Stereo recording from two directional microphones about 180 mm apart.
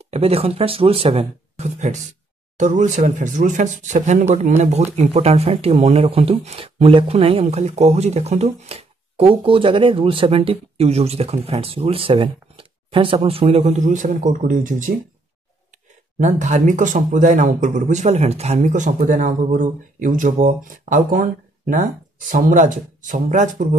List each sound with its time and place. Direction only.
0.0 s speech: 35° right (ahead or behind)
16.2 s speech: 40° right (ahead or behind)
22.3 s speech: 45° right (ahead or behind)